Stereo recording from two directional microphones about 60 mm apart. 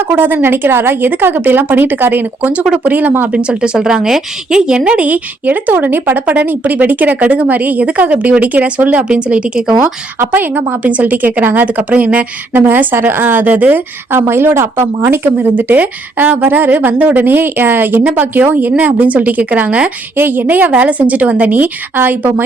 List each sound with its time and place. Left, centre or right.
0.0 s a woman's voice: right
3.3 s a woman's voice: centre
10.2 s a woman's voice: right
20.1 s a woman's voice: right